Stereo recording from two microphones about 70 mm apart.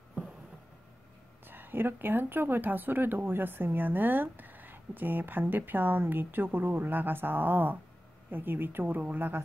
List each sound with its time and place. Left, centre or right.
1.5 s speech: right